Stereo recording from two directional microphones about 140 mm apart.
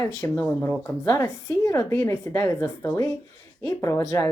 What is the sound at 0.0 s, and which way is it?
Speech, 15° left (ahead or behind).